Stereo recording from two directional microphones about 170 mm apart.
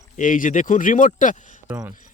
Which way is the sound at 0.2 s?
50° left (ahead or behind).